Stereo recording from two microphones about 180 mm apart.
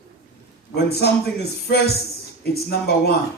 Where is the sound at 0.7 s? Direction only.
65° left (ahead or behind).